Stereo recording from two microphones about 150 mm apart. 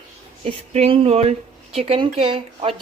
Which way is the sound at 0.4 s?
40° right (ahead or behind).